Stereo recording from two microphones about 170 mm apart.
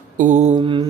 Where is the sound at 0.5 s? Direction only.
30° right (ahead or behind).